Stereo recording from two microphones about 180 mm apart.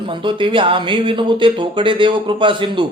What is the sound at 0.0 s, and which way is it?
Speech, 30° right (ahead or behind).